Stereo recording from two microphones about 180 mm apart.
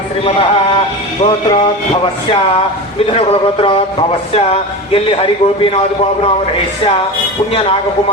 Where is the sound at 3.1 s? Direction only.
35° left (ahead or behind).